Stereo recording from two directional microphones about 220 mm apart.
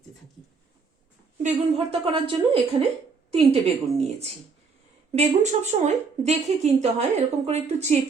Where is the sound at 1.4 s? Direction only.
25° right (ahead or behind).